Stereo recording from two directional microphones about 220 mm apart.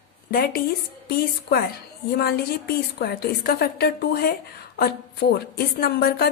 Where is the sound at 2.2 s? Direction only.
45° left (ahead or behind).